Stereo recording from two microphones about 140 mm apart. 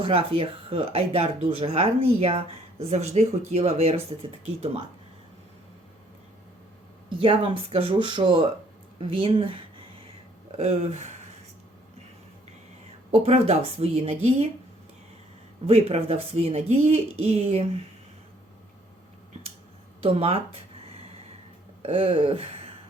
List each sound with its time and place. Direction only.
0.0 s speech: 40° right (ahead or behind)
7.2 s speech: 35° right (ahead or behind)
10.6 s speech: 50° right (ahead or behind)
13.1 s speech: 45° right (ahead or behind)
15.6 s speech: 45° right (ahead or behind)
20.0 s speech: 45° right (ahead or behind)